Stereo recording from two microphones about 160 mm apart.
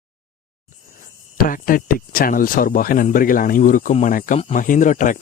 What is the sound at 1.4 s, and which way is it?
Speech, 60° left (ahead or behind).